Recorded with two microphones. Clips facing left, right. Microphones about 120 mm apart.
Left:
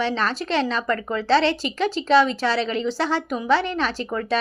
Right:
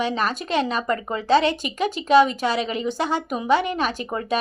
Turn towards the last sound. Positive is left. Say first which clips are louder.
# even
turn(degrees=-15)  # may be behind; listen again after turning